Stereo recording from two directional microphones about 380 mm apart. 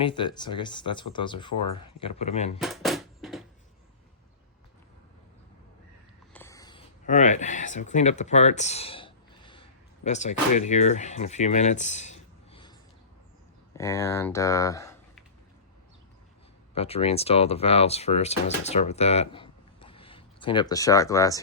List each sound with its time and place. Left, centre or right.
0.0 s speech: centre
2.6 s a sound: centre
6.3 s speech: centre
13.7 s speech: centre
16.7 s speech: centre